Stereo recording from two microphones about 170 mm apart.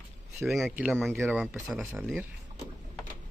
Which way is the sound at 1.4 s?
Centre (ahead or behind).